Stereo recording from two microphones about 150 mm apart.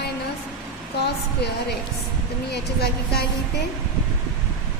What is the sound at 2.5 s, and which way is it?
Speech, 90° left.